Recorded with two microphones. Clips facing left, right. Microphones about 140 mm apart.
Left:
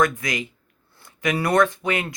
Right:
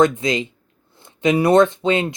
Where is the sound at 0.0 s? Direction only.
25° right (ahead or behind).